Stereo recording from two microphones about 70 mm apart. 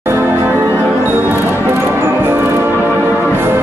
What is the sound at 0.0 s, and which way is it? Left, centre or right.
Music, right.